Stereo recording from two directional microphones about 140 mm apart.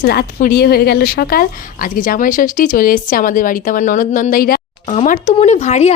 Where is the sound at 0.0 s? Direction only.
80° left.